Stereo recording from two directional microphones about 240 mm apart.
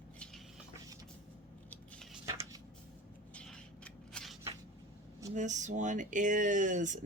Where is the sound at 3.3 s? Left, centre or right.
Centre.